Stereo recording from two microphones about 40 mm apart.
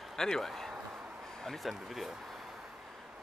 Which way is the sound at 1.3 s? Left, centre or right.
Centre.